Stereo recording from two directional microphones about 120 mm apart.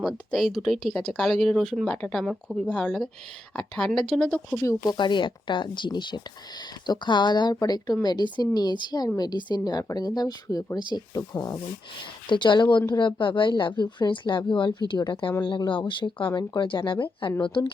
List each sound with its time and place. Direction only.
0.0 s speech: centre (ahead or behind)
4.9 s speech: 40° left (ahead or behind)
12.3 s speech: 40° left (ahead or behind)